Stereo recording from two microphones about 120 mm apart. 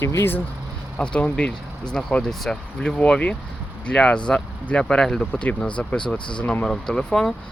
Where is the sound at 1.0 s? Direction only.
10° left (ahead or behind).